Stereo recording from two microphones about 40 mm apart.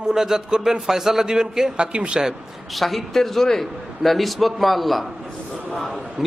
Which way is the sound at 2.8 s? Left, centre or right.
Centre.